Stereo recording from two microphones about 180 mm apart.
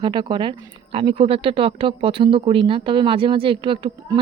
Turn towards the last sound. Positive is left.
turn(degrees=-30)  # may be behind; listen again after turning